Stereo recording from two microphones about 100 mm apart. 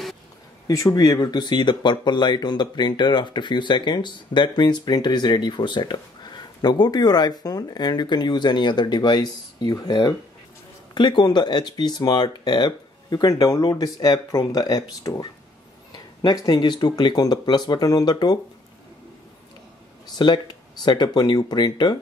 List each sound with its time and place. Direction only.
0.7 s speech: 35° left (ahead or behind)
20.2 s speech: 45° left (ahead or behind)